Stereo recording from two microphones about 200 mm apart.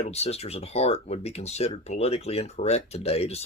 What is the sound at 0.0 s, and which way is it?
Speech, 30° left (ahead or behind).